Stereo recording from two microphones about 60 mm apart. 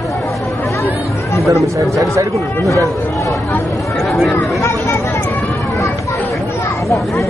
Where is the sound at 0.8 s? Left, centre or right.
Left.